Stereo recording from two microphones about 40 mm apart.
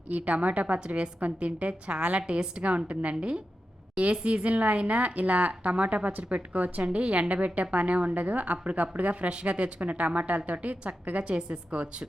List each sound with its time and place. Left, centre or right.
0.1 s a woman's voice: right
9.3 s a woman's voice: right
11.2 s a woman's voice: right